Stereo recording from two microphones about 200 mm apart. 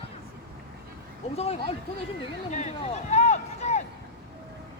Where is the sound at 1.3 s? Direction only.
30° left (ahead or behind).